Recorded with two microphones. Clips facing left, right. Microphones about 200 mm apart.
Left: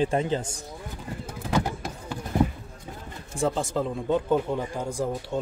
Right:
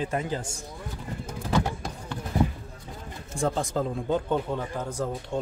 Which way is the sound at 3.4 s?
Centre (ahead or behind).